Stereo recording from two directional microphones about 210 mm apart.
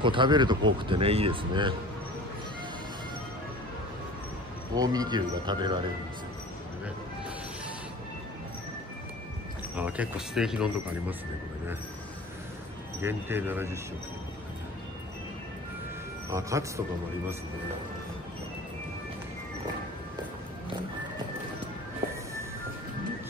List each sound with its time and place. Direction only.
0.0 s speech: 25° right (ahead or behind)
4.7 s speech: 20° right (ahead or behind)
9.8 s speech: 5° right (ahead or behind)
13.0 s speech: 10° right (ahead or behind)
16.3 s speech: 15° right (ahead or behind)